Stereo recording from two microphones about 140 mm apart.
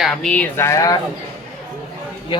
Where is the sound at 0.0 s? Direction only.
5° left (ahead or behind).